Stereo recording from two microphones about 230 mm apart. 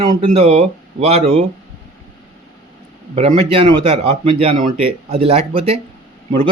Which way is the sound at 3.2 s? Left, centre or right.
Right.